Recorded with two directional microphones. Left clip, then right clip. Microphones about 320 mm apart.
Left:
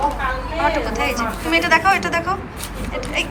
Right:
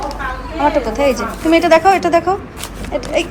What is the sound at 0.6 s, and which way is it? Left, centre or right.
Speech, centre.